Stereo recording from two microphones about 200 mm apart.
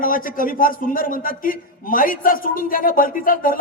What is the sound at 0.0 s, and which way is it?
A man's voice, 45° left (ahead or behind).